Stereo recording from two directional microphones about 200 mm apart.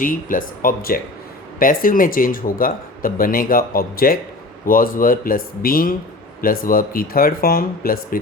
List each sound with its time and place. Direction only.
0.0 s speech: 45° left (ahead or behind)